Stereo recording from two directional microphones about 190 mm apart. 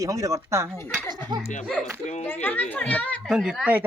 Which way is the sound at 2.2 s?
10° left (ahead or behind).